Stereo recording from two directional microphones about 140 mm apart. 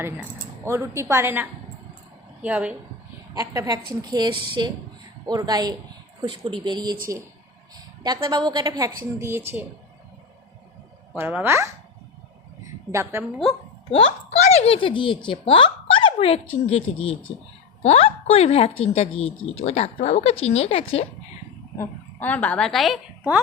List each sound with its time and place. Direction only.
0.0 s a woman's voice: 15° right (ahead or behind)
3.3 s a woman's voice: 25° right (ahead or behind)
8.0 s a woman's voice: 30° right (ahead or behind)
9.1 s a woman's voice: 15° right (ahead or behind)
11.2 s a woman's voice: 15° right (ahead or behind)
12.9 s a woman's voice: 20° right (ahead or behind)
13.9 s a woman's voice: 50° left (ahead or behind)
17.8 s a woman's voice: 45° left (ahead or behind)
21.8 s a woman's voice: 10° left (ahead or behind)